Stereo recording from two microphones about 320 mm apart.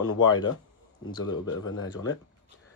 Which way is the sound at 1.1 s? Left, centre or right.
Centre.